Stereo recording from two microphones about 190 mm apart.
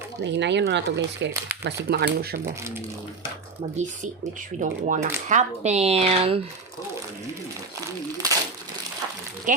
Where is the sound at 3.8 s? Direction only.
40° right (ahead or behind).